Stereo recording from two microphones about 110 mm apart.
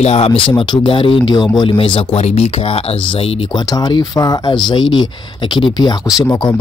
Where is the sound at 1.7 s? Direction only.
55° left (ahead or behind).